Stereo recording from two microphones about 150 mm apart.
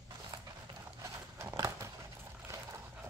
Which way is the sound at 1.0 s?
20° right (ahead or behind).